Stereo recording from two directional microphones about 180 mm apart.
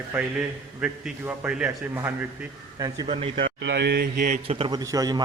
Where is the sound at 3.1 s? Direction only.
35° right (ahead or behind).